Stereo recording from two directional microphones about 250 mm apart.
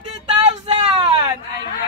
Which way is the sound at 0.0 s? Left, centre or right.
Right.